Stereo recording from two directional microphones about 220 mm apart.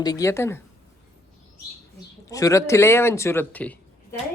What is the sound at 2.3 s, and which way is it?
Speech, 15° left (ahead or behind).